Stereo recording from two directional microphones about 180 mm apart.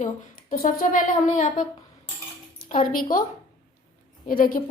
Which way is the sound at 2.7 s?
45° left (ahead or behind).